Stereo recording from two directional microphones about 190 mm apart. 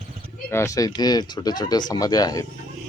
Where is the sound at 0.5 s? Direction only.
15° left (ahead or behind).